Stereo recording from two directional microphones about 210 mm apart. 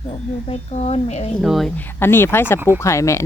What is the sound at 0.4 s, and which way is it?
Speech, 30° left (ahead or behind).